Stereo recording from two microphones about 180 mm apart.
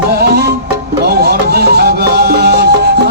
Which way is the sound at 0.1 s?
65° right (ahead or behind).